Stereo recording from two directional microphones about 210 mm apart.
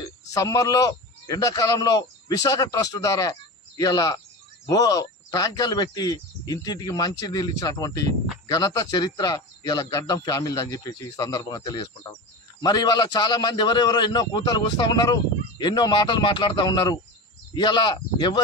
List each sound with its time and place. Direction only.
0.3 s a man's voice: 15° left (ahead or behind)